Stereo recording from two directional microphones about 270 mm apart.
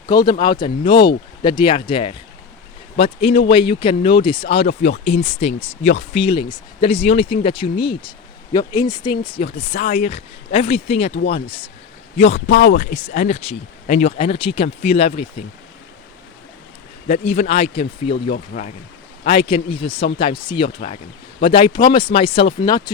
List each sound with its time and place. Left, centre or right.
0.1 s speech: centre
17.1 s speech: left
18.1 s speech: left; by 22.8 s centre